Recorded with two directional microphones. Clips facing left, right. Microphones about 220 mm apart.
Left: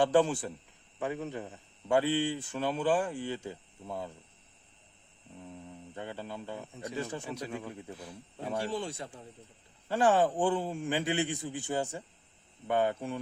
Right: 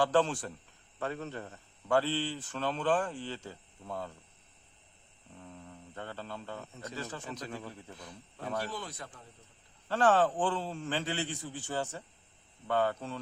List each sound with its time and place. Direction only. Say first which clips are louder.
0.0 s a man's voice: left 3 dB; 10° left (ahead or behind)
5.4 s a man's voice: left 3 dB; 15° left (ahead or behind)
8.5 s speech: left 5 dB; 25° left (ahead or behind)
9.9 s a man's voice: left 1 dB; 10° left (ahead or behind)